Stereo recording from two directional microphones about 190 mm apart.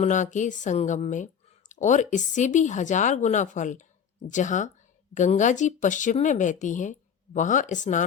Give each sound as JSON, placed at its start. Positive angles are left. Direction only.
{"t": 0.0, "sound": "a woman's voice", "side_deg": 40}